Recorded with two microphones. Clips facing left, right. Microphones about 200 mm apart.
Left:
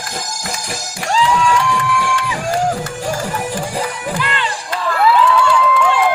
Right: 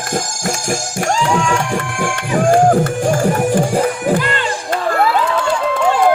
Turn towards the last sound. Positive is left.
turn(degrees=-45)  # may be behind; listen again after turning